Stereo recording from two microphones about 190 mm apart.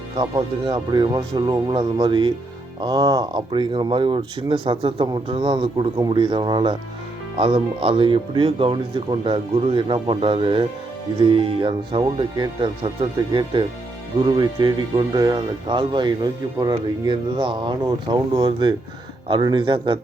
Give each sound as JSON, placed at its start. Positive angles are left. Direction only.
{"t": 0.2, "sound": "speech", "side_deg": -20}